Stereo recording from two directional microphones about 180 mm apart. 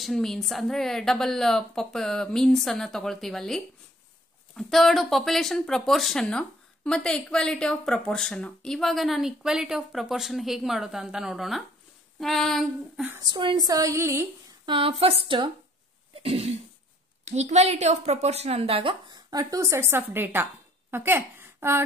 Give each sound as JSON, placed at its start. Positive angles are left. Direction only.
{"t": 0.0, "sound": "speech", "side_deg": 0}
{"t": 13.2, "sound": "speech", "side_deg": -25}
{"t": 14.7, "sound": "a woman's voice", "side_deg": -30}